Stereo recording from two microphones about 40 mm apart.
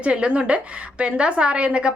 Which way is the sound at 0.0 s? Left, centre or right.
Right.